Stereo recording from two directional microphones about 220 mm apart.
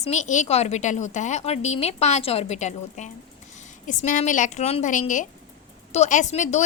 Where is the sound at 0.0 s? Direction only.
30° left (ahead or behind).